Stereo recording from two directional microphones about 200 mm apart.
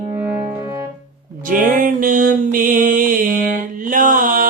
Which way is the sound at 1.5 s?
40° right (ahead or behind).